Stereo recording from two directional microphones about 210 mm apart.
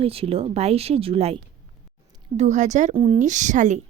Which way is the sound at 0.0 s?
25° right (ahead or behind).